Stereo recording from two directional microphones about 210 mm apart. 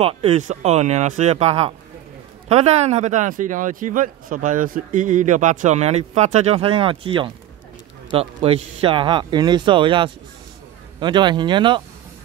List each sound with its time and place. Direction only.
0.0 s speech: 30° right (ahead or behind)